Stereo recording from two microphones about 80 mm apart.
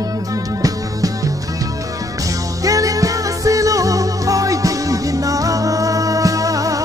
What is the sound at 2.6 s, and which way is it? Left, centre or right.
Music, right.